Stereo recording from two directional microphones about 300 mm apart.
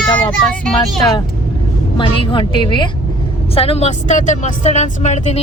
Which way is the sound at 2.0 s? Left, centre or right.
Centre.